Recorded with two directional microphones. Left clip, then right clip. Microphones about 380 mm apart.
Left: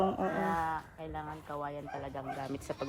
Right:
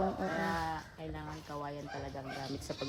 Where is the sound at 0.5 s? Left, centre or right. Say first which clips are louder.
Left 3 dB; centre.